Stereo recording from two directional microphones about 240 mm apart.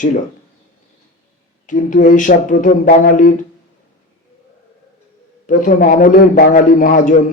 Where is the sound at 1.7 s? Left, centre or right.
Left.